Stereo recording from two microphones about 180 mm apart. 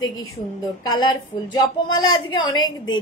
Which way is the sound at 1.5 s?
25° left (ahead or behind).